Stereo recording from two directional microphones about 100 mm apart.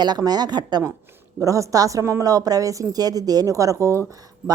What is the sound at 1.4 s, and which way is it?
A woman's voice, 35° right (ahead or behind).